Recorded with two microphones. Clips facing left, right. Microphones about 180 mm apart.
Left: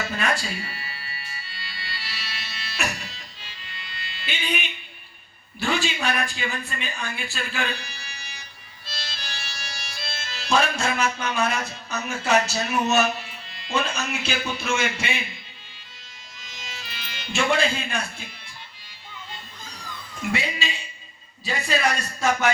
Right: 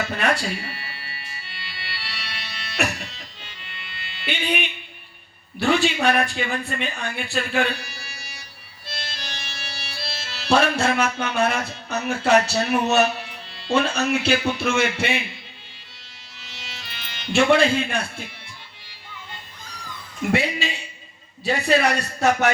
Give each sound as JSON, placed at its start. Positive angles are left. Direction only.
{"t": 0.2, "sound": "music", "side_deg": -60}
{"t": 4.3, "sound": "a man's voice", "side_deg": -60}
{"t": 5.5, "sound": "a man's voice", "side_deg": -60}
{"t": 8.9, "sound": "music", "side_deg": -60}
{"t": 16.4, "sound": "music", "side_deg": -70}
{"t": 20.3, "sound": "a man's voice", "side_deg": -60}